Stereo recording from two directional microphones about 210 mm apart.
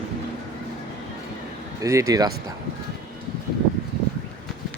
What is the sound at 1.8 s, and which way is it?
Speech, 15° right (ahead or behind).